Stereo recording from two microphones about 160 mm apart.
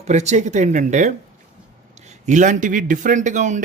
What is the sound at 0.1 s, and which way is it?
Speech, 45° right (ahead or behind).